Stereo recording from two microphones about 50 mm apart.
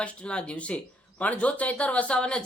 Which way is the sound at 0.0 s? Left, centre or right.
Left.